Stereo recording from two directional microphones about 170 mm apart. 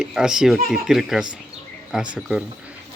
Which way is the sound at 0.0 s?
5° right (ahead or behind).